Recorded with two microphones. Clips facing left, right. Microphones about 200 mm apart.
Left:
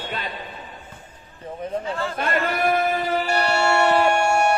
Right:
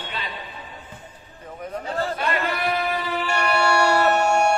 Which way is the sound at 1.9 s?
40° right (ahead or behind).